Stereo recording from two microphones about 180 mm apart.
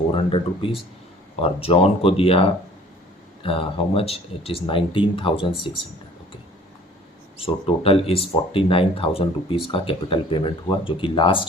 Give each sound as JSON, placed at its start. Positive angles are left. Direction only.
{"t": 0.1, "sound": "speech", "side_deg": 30}
{"t": 7.3, "sound": "speech", "side_deg": 30}